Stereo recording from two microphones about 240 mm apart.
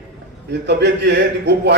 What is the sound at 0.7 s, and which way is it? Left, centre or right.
A man's voice, right.